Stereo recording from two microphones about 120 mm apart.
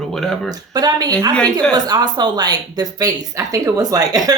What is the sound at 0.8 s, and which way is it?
A woman's voice, 35° right (ahead or behind).